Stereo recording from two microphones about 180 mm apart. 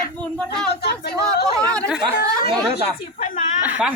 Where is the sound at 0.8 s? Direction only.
60° left (ahead or behind).